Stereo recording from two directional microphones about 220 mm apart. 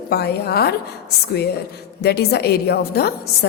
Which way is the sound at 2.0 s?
45° left (ahead or behind).